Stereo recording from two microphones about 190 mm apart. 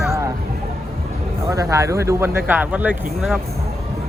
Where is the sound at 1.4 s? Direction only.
15° right (ahead or behind).